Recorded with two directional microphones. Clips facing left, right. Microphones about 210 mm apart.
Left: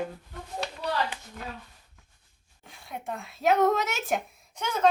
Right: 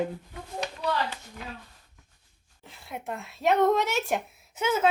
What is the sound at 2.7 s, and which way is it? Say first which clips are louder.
Speech: even; centre (ahead or behind).